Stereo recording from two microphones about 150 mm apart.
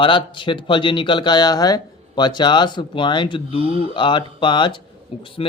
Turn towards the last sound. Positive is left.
turn(degrees=40)  # may be behind; listen again after turning